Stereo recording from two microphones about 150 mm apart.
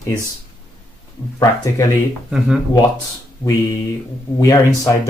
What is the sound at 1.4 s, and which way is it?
Speech, 25° left (ahead or behind).